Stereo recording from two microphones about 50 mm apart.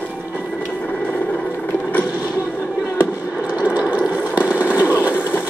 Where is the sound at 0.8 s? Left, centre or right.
Left.